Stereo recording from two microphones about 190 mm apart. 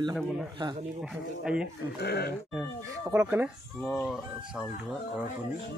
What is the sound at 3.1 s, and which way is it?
Speech, 10° right (ahead or behind).